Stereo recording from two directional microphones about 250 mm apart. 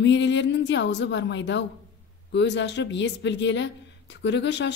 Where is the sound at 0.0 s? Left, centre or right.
Left.